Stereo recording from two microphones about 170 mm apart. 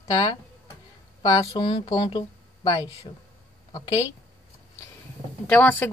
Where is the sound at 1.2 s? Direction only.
25° left (ahead or behind).